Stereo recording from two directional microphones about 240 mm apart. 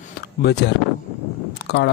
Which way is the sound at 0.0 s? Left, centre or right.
Left.